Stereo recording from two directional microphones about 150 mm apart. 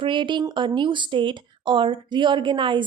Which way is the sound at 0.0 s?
30° right (ahead or behind).